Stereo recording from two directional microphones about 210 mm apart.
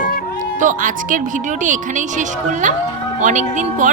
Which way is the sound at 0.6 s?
40° right (ahead or behind).